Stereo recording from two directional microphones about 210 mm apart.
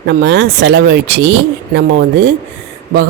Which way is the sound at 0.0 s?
55° right (ahead or behind).